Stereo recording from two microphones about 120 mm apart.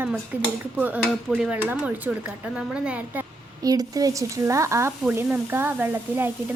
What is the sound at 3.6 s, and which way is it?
A woman's voice, 30° right (ahead or behind).